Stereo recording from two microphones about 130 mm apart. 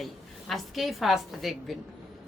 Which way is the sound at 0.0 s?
Centre (ahead or behind).